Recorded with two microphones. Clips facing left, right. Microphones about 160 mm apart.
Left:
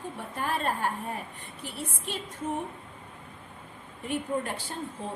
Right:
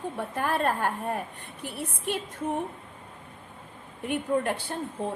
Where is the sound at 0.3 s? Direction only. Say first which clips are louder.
Right 3 dB; 55° right (ahead or behind).